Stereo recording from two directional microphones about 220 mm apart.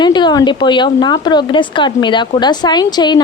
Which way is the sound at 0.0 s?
20° left (ahead or behind).